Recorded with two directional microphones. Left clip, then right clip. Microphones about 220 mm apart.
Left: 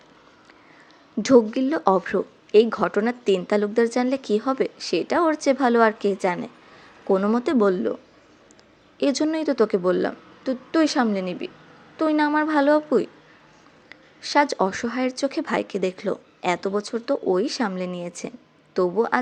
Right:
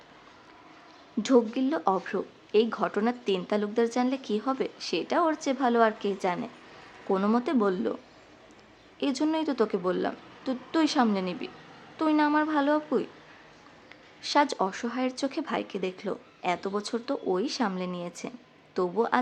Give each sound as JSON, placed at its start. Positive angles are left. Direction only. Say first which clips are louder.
{"t": 1.2, "sound": "speech", "louder": "left 7 dB", "side_deg": 15}
{"t": 9.0, "sound": "speech", "louder": "left 6 dB", "side_deg": 20}